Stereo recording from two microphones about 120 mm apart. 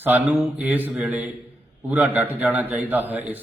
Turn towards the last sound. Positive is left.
turn(degrees=-15)  # may be behind; listen again after turning